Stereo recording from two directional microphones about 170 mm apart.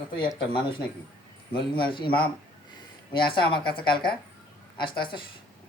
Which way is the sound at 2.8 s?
30° left (ahead or behind).